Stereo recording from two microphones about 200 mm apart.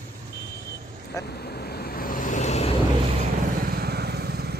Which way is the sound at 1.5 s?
50° left (ahead or behind).